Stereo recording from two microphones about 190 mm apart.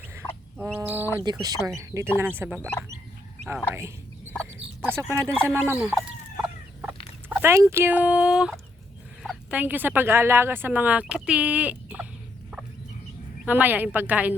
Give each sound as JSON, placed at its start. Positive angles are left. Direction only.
{"t": 0.6, "sound": "speech", "side_deg": -10}
{"t": 1.2, "sound": "speech", "side_deg": -20}
{"t": 2.6, "sound": "speech", "side_deg": 10}
{"t": 4.8, "sound": "speech", "side_deg": -10}
{"t": 5.2, "sound": "speech", "side_deg": 0}
{"t": 5.6, "sound": "chicken", "side_deg": -10}
{"t": 9.2, "sound": "fowl", "side_deg": 0}
{"t": 9.6, "sound": "speech", "side_deg": -10}
{"t": 13.4, "sound": "speech", "side_deg": -10}